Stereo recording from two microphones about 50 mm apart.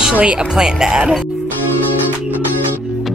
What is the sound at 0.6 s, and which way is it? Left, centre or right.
Speech, centre.